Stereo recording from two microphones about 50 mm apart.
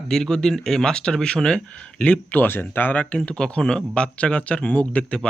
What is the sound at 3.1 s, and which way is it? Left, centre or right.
Speech, left.